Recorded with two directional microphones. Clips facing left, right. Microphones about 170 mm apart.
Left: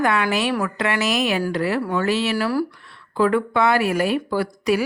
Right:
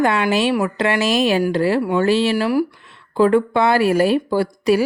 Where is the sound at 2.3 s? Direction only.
15° right (ahead or behind).